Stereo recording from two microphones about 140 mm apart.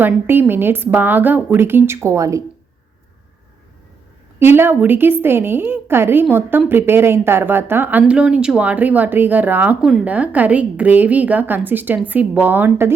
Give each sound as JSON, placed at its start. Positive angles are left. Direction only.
{"t": 0.0, "sound": "speech", "side_deg": -15}
{"t": 4.4, "sound": "speech", "side_deg": -15}